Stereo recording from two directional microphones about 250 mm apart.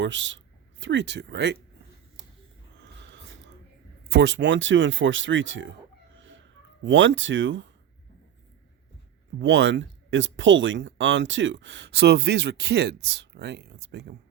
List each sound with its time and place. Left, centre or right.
0.0 s speech: right
2.8 s a sound: right
4.1 s speech: right
6.1 s a sound: right
6.8 s speech: right
9.4 s speech: right